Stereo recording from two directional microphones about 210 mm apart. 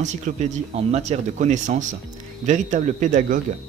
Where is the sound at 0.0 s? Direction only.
35° right (ahead or behind).